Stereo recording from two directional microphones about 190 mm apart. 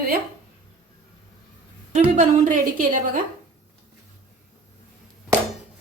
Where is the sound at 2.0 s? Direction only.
40° right (ahead or behind).